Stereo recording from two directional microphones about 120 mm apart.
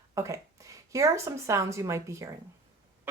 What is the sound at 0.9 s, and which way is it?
A woman's voice, 25° right (ahead or behind).